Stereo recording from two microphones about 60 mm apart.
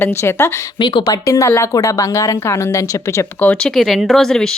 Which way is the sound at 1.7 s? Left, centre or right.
Left.